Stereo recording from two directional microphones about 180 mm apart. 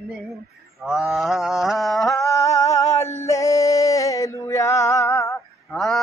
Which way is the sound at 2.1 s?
15° left (ahead or behind).